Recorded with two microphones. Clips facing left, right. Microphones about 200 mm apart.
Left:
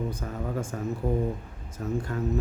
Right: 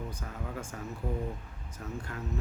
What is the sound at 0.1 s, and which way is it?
Speech, 45° left (ahead or behind).